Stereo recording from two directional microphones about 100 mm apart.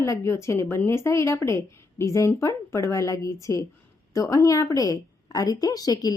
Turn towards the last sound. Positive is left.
turn(degrees=40)  # may be behind; listen again after turning